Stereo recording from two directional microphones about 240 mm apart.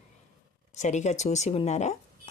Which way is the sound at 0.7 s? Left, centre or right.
Left.